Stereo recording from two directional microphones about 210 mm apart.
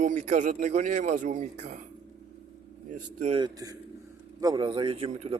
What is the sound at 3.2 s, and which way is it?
Speech, 25° right (ahead or behind).